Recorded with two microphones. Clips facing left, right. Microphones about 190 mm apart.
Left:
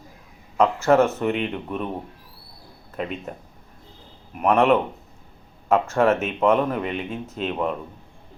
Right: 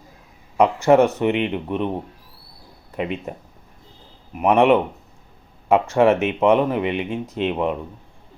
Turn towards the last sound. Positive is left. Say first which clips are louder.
# right 4 dB
turn(degrees=-10)  # may be behind; listen again after turning